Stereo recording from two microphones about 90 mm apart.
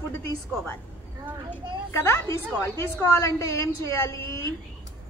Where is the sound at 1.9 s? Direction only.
30° left (ahead or behind).